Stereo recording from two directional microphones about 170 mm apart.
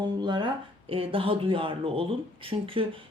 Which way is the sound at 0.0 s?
25° right (ahead or behind).